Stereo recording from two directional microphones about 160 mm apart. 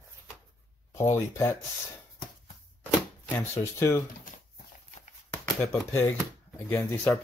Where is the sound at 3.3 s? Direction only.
15° left (ahead or behind).